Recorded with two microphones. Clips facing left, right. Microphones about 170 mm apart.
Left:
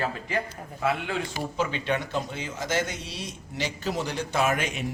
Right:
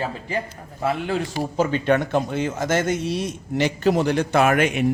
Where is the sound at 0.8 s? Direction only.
40° right (ahead or behind).